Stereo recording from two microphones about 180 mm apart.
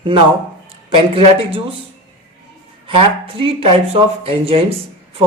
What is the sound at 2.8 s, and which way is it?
Speech, 30° right (ahead or behind).